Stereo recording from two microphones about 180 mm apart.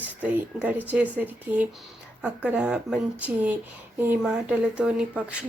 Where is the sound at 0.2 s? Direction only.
10° right (ahead or behind).